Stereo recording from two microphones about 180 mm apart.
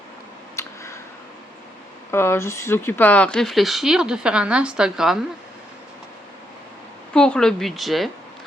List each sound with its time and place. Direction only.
0.6 s a sound: 15° left (ahead or behind)
2.0 s speech: 15° left (ahead or behind); by 5.2 s 5° right (ahead or behind)
7.1 s speech: 5° left (ahead or behind)